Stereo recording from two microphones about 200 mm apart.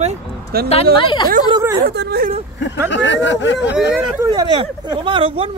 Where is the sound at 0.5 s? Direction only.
50° right (ahead or behind).